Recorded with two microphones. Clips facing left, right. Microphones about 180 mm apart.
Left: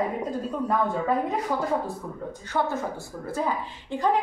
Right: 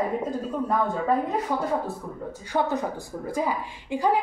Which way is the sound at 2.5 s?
15° right (ahead or behind).